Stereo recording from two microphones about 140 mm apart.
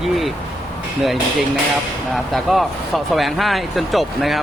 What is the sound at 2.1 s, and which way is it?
Speech, centre (ahead or behind).